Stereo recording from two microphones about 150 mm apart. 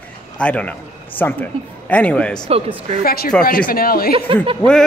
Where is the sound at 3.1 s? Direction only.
90° left.